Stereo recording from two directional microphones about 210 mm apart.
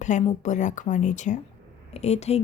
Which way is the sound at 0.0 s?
35° left (ahead or behind).